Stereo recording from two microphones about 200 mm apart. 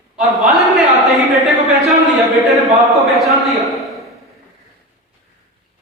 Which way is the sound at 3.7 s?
Centre (ahead or behind).